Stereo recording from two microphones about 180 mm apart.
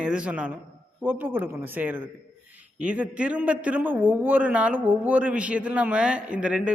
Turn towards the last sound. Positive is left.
turn(degrees=-5)  # may be behind; listen again after turning